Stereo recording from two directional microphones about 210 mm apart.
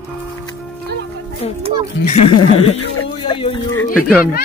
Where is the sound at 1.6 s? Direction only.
30° right (ahead or behind).